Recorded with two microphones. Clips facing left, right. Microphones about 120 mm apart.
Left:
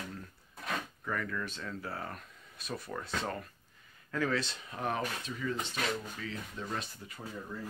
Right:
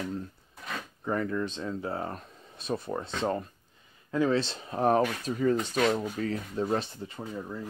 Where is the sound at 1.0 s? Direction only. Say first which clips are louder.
Right 7 dB; 30° right (ahead or behind).